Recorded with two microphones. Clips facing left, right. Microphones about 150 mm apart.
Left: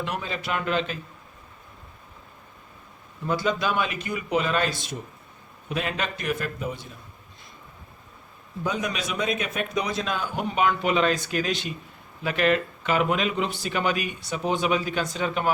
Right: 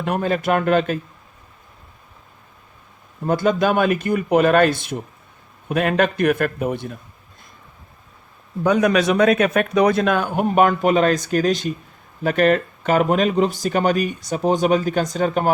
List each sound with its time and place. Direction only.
0.0 s speech: 50° right (ahead or behind)
3.2 s a man's voice: 50° right (ahead or behind)
8.6 s a man's voice: 65° right (ahead or behind); by 15.5 s 45° right (ahead or behind)